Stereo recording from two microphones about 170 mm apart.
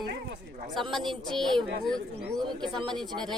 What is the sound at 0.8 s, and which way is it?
A woman's voice, centre (ahead or behind).